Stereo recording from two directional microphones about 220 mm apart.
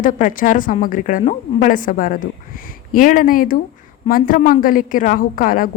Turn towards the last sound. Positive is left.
turn(degrees=40)  # may be behind; listen again after turning